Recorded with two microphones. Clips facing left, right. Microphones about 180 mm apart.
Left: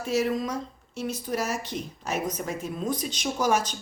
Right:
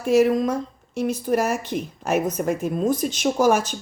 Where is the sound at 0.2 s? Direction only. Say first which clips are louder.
Right 7 dB; 55° right (ahead or behind).